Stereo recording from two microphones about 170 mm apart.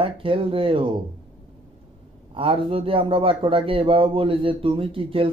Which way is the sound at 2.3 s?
30° right (ahead or behind).